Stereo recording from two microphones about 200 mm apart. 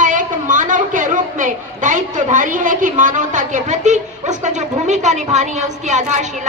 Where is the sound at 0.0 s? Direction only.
40° right (ahead or behind).